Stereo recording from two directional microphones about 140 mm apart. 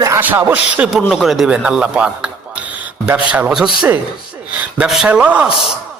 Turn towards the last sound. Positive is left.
turn(degrees=-10)  # may be behind; listen again after turning